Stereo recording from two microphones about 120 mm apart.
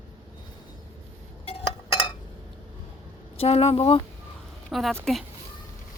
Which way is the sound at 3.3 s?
55° left (ahead or behind).